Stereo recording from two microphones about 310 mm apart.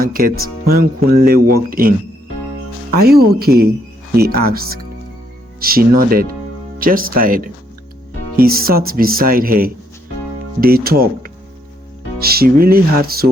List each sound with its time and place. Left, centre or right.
0.0 s speech: right
2.9 s speech: right